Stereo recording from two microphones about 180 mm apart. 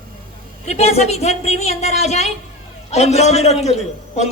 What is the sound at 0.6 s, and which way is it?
A man's voice, 40° left (ahead or behind).